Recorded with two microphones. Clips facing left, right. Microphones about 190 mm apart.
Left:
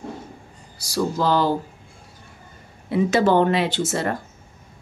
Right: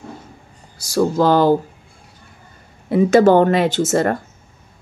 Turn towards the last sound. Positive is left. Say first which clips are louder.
# right 7 dB
turn(degrees=-50)  # may be behind; listen again after turning